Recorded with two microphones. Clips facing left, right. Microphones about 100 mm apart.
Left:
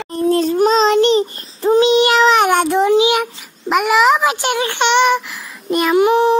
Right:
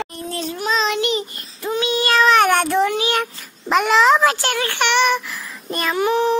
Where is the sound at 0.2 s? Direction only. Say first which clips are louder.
Left 16 dB; 40° left (ahead or behind); by 2.9 s 15° left (ahead or behind).